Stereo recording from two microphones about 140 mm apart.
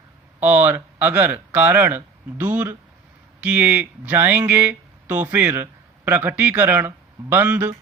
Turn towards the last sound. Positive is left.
turn(degrees=-15)  # may be behind; listen again after turning